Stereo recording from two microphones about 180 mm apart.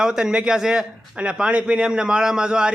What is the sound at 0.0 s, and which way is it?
Speech, 5° right (ahead or behind).